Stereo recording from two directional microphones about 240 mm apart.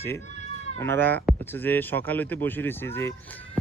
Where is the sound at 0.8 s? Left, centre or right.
Centre.